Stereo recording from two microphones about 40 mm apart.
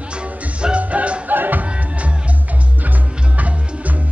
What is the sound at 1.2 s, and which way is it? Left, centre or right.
Music, right.